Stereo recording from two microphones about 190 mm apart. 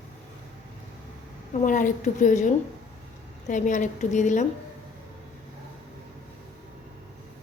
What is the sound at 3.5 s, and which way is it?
Speech, 40° left (ahead or behind).